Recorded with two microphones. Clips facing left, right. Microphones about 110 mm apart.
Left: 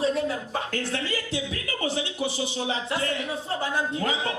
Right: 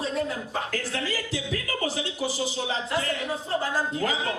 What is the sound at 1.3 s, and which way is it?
Music, 30° left (ahead or behind).